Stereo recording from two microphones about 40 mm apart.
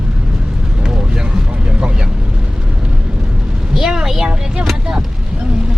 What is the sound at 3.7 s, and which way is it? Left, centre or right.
Vehicle, centre.